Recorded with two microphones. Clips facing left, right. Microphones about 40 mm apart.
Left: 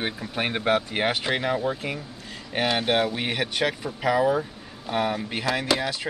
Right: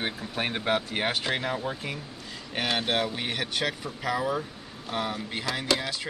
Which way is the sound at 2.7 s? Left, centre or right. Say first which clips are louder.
Left 3 dB; centre.